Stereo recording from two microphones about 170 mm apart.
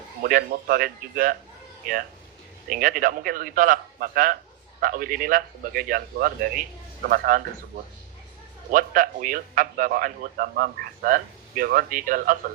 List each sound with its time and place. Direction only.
0.2 s a man's voice: 60° right (ahead or behind)
8.7 s a man's voice: 55° right (ahead or behind)